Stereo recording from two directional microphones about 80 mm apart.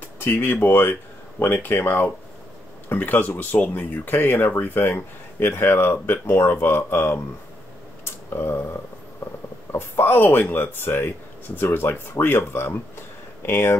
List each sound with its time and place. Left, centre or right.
0.2 s speech: left
8.0 s a sound: left
9.7 s speech: left